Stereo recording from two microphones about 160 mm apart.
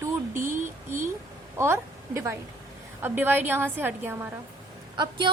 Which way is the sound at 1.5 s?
15° right (ahead or behind).